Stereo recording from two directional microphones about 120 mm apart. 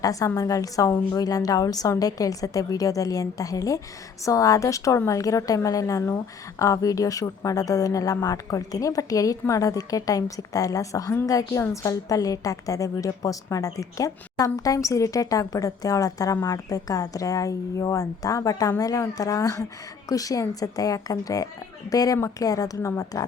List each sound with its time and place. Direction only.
0.0 s speech: 30° left (ahead or behind)